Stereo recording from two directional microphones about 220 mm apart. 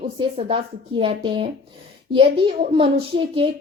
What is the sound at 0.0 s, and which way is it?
Speech, 25° right (ahead or behind).